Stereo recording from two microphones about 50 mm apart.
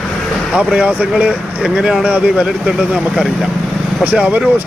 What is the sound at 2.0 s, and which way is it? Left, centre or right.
Speech, right.